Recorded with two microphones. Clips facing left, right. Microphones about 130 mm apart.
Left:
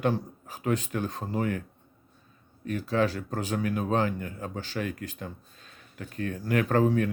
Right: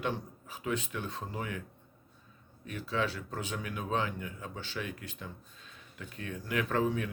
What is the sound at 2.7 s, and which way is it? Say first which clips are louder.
Speech: left 7 dB; 45° left (ahead or behind).